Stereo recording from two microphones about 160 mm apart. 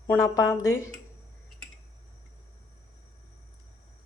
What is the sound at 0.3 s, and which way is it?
Speech, 20° left (ahead or behind).